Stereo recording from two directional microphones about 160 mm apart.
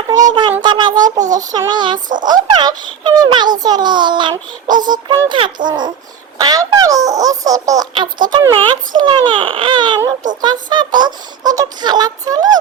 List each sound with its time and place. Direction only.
0.1 s a child's voice: 20° right (ahead or behind)